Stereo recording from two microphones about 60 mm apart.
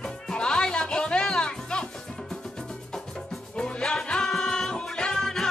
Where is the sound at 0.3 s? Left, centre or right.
Centre.